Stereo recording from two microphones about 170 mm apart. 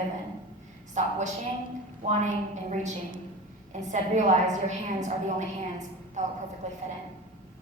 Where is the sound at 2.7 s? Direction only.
45° right (ahead or behind).